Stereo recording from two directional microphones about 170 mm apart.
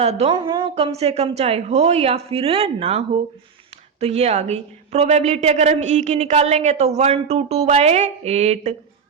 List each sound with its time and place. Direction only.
0.0 s a woman's voice: 40° right (ahead or behind)
0.3 s a woman's voice: 25° right (ahead or behind)
4.0 s a woman's voice: 40° right (ahead or behind)